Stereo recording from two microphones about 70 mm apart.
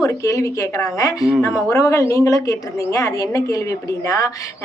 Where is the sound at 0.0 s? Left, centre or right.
Left.